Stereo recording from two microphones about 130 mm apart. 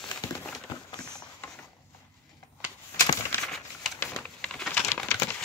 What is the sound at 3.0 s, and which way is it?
Bird, 25° left (ahead or behind).